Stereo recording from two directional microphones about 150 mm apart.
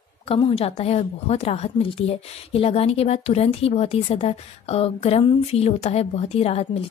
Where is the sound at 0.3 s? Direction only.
40° left (ahead or behind).